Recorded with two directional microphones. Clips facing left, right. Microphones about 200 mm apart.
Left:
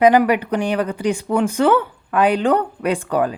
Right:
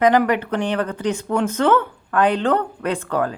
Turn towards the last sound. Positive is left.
turn(degrees=15)  # may be behind; listen again after turning